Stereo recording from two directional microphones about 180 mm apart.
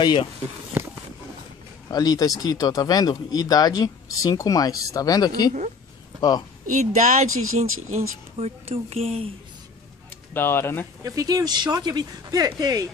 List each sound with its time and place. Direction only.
0.0 s speech: 25° left (ahead or behind)
0.8 s a sound: 10° right (ahead or behind)
1.9 s speech: 20° left (ahead or behind)
6.6 s speech: 45° right (ahead or behind)
10.3 s speech: 10° left (ahead or behind)
11.1 s speech: 20° right (ahead or behind)